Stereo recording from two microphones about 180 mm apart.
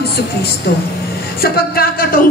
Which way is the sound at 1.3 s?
55° left (ahead or behind).